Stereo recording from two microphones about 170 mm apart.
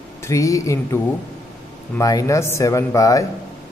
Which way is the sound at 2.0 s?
20° left (ahead or behind).